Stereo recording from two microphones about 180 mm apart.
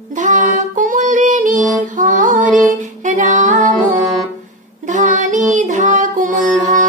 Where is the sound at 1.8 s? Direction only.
45° right (ahead or behind).